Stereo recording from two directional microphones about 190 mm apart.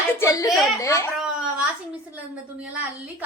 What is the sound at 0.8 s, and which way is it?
Speech, 15° left (ahead or behind).